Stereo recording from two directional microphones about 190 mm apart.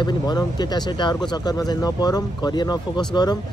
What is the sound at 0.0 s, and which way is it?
Speech, 20° left (ahead or behind).